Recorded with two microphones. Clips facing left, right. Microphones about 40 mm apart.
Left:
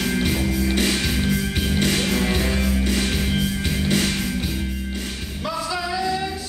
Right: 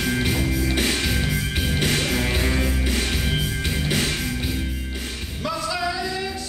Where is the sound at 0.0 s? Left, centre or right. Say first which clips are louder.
Left 1 dB; centre.